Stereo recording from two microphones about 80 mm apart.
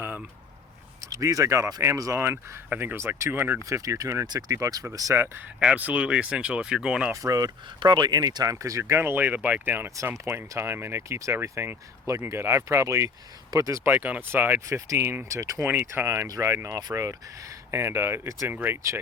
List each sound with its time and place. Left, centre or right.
1.1 s speech: right
2.2 s speech: right
3.3 s speech: right
3.7 s speech: right
5.5 s speech: centre
7.1 s speech: right
7.8 s speech: right
8.2 s speech: right
13.8 s speech: right
14.7 s speech: right
15.6 s speech: right
16.6 s speech: right
18.4 s speech: right